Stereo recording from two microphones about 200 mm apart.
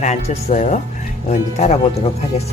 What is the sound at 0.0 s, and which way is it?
Speech, 35° left (ahead or behind).